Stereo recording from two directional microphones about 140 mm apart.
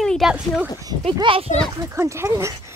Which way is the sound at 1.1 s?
40° right (ahead or behind).